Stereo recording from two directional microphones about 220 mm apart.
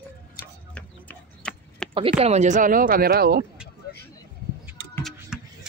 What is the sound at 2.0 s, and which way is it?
Speech, 25° right (ahead or behind).